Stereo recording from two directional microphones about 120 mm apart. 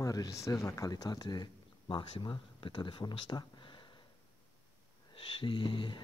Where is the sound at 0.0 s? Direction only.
30° left (ahead or behind).